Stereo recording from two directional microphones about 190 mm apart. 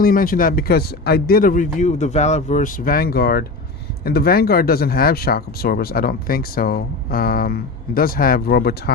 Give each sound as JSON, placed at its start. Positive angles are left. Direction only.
{"t": 0.0, "sound": "speech", "side_deg": 50}